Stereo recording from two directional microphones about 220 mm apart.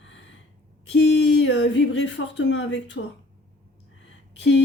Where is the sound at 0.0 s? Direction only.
60° left (ahead or behind).